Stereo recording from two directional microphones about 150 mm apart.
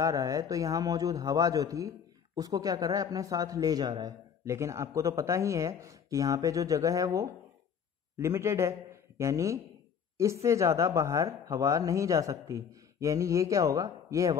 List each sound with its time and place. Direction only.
0.0 s a man's voice: 20° right (ahead or behind)